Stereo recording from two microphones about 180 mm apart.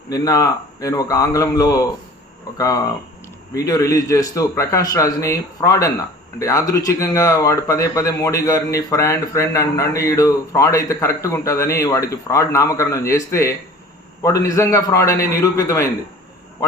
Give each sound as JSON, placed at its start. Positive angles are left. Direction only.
{"t": 0.1, "sound": "a man's voice", "side_deg": 20}
{"t": 3.5, "sound": "a man's voice", "side_deg": 20}